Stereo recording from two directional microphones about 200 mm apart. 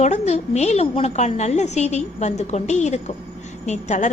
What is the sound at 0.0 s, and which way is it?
A woman's voice, 35° left (ahead or behind).